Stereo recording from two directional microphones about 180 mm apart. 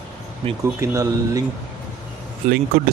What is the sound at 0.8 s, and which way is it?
Speech, 15° right (ahead or behind).